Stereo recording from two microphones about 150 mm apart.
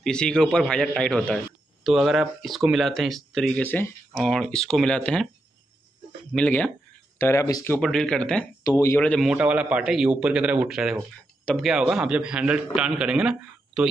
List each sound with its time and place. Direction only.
0.0 s speech: 5° left (ahead or behind)
6.3 s speech: 5° left (ahead or behind)
7.2 s speech: 15° left (ahead or behind)
7.7 s speech: 5° left (ahead or behind)
8.6 s speech: 20° left (ahead or behind)
9.1 s speech: centre (ahead or behind)